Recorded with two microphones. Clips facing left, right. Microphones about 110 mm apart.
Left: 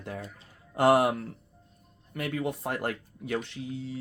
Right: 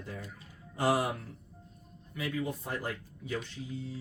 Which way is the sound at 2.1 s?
65° left (ahead or behind).